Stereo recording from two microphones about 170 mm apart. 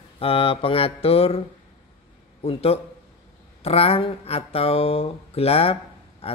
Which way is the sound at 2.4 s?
35° left (ahead or behind).